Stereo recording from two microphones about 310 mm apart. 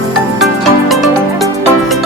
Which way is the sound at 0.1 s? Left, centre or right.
Centre.